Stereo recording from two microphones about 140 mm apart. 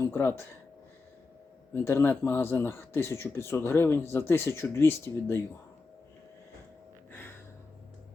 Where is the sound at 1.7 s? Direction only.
15° left (ahead or behind).